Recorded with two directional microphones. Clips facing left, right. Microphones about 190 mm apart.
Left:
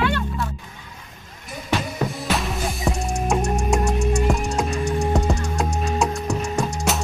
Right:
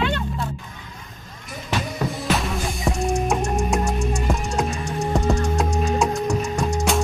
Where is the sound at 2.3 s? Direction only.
Centre (ahead or behind).